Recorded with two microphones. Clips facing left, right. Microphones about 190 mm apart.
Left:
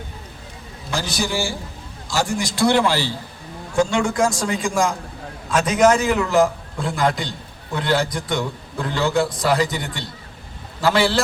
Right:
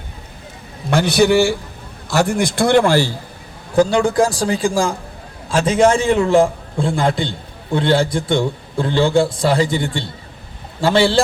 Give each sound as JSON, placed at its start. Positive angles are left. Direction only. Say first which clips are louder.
{"t": 0.9, "sound": "a man's voice", "louder": "right 11 dB", "side_deg": -65}
{"t": 3.8, "sound": "a man's voice", "louder": "right 5 dB", "side_deg": -35}